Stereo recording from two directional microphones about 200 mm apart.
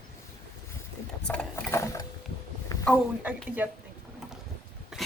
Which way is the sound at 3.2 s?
10° right (ahead or behind).